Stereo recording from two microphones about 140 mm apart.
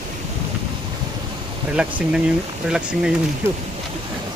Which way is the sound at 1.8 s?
10° right (ahead or behind).